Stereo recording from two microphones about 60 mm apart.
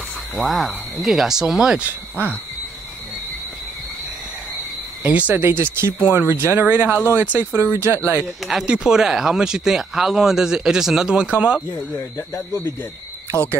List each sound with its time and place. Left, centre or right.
0.4 s speech: centre
1.9 s speech: right
5.0 s speech: right
8.5 s speech: centre
12.2 s speech: left
13.3 s speech: right